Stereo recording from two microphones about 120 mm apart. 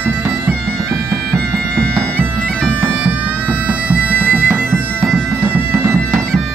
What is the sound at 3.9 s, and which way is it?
Bagpipes, 15° right (ahead or behind).